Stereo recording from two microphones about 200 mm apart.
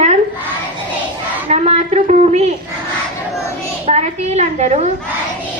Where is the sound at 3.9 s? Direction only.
35° right (ahead or behind).